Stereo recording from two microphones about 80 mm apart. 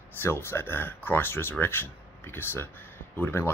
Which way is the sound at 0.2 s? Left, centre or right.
Left.